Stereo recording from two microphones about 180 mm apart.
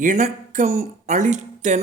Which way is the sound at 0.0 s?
45° right (ahead or behind).